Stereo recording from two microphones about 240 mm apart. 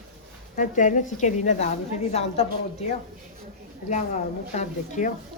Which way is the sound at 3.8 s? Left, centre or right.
Left.